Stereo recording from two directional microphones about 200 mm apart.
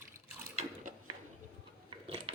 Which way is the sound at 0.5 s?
40° right (ahead or behind).